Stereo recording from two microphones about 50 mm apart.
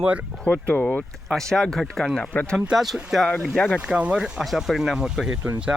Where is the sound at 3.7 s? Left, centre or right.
Right.